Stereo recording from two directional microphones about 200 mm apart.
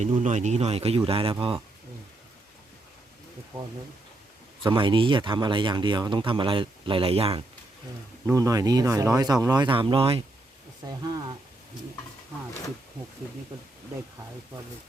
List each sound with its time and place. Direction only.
0.0 s speech: 35° right (ahead or behind)
4.6 s speech: 25° right (ahead or behind)
8.3 s speech: 15° right (ahead or behind)